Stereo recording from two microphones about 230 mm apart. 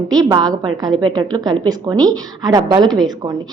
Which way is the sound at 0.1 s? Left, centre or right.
Centre.